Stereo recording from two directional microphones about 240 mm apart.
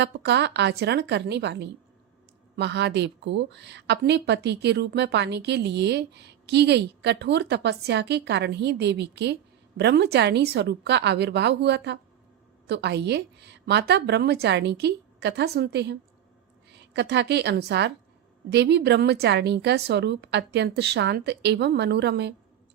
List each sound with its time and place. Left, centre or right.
0.0 s a woman's voice: right